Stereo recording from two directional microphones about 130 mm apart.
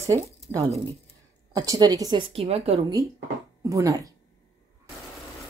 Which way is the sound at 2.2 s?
50° right (ahead or behind).